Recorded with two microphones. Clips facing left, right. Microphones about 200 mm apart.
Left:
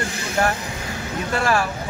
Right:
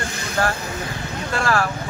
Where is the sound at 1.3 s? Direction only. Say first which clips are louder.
Left 1 dB; 20° left (ahead or behind).